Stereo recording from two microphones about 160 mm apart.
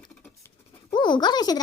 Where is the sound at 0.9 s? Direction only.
30° left (ahead or behind).